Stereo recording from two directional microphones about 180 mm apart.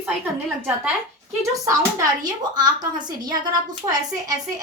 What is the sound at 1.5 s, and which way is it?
Speech, 20° right (ahead or behind).